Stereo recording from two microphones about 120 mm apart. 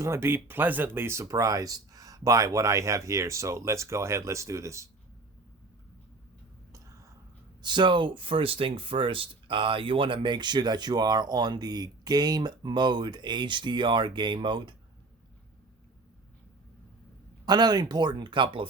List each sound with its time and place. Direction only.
0.0 s speech: 20° right (ahead or behind)
6.7 s whispering: 25° right (ahead or behind)
7.6 s speech: 40° right (ahead or behind)
17.4 s speech: 35° right (ahead or behind)